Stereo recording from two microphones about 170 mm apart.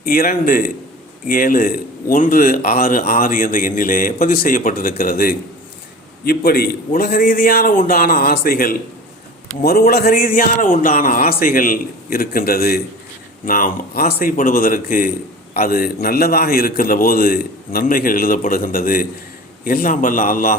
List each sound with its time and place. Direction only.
0.0 s a man's voice: 55° left (ahead or behind)